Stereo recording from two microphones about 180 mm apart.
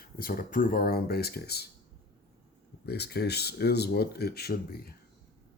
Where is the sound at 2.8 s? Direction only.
65° left (ahead or behind).